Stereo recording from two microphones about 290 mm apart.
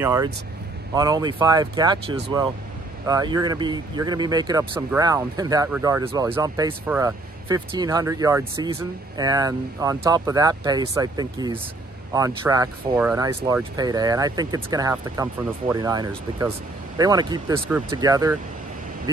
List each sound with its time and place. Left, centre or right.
0.0 s speech: centre